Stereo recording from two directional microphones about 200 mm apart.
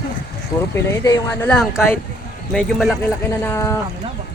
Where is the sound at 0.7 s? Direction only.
15° left (ahead or behind).